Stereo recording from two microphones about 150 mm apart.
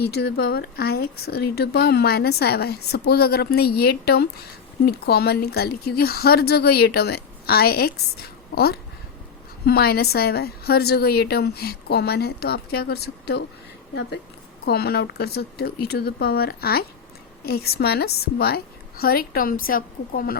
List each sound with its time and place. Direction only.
0.0 s speech: 90° left
14.6 s speech: 90° left; by 20.3 s 75° left (ahead or behind)